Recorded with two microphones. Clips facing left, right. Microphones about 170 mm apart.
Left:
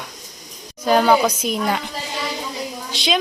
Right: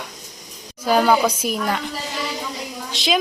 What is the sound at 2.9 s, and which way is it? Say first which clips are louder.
Speech: right 1 dB; centre (ahead or behind).